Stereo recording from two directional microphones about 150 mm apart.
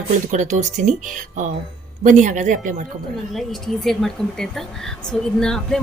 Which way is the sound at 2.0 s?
55° right (ahead or behind).